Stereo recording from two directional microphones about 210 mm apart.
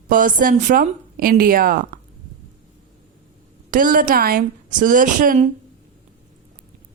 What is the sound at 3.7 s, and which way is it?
A woman's voice, 40° right (ahead or behind).